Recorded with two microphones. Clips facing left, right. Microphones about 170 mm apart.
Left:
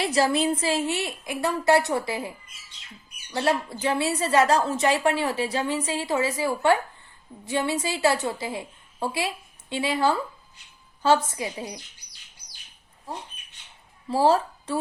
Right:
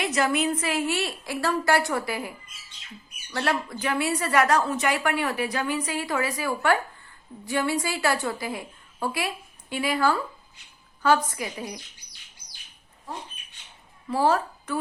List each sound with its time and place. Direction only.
0.0 s a woman's voice: 30° left (ahead or behind)
3.3 s a woman's voice: 25° left (ahead or behind)
14.1 s speech: 30° left (ahead or behind)